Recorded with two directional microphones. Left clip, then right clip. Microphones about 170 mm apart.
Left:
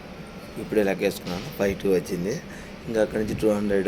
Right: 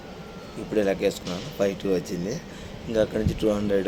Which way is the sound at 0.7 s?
5° right (ahead or behind).